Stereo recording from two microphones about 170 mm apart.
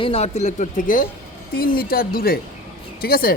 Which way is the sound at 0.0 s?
35° left (ahead or behind).